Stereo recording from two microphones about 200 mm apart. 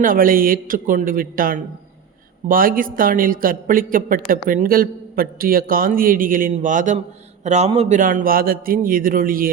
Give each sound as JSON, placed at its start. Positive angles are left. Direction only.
{"t": 0.0, "sound": "a man's voice", "side_deg": -45}